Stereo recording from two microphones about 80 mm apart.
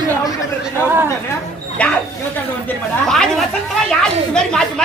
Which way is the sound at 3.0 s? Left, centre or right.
Centre.